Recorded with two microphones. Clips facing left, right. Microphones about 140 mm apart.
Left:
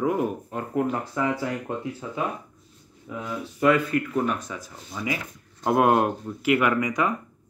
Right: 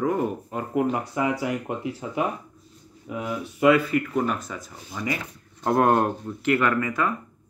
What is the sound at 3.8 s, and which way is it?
Speech, centre (ahead or behind).